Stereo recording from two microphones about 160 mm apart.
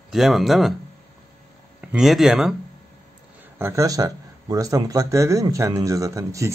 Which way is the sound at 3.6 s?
15° right (ahead or behind).